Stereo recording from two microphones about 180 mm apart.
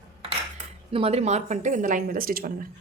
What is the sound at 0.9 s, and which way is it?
A woman's voice, 35° right (ahead or behind).